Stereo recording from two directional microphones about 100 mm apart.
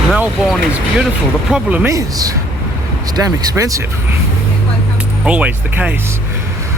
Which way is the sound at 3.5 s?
35° right (ahead or behind).